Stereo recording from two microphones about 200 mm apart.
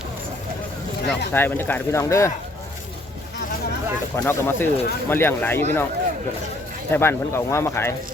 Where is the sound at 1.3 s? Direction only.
10° left (ahead or behind).